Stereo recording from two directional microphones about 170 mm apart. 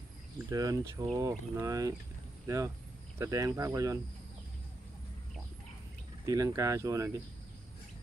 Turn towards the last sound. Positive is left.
turn(degrees=-20)  # may be behind; listen again after turning